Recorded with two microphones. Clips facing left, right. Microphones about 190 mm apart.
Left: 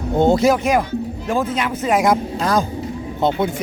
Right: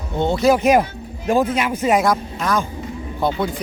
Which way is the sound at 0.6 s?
20° right (ahead or behind).